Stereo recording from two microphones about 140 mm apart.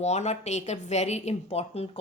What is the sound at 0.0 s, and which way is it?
A woman's voice, 55° left (ahead or behind).